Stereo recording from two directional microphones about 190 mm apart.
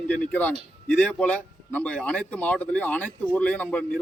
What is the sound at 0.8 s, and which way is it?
A man's voice, 5° left (ahead or behind).